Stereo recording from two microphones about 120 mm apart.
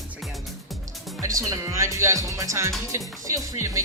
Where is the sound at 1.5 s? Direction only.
25° right (ahead or behind).